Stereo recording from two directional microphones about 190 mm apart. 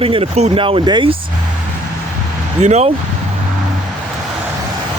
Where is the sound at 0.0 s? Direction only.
30° right (ahead or behind).